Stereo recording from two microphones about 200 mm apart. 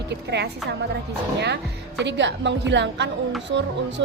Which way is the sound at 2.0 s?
60° right (ahead or behind).